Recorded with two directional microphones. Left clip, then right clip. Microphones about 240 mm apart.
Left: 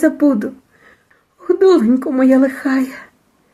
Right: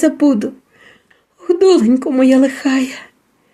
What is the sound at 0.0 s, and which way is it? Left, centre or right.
A woman's voice, right.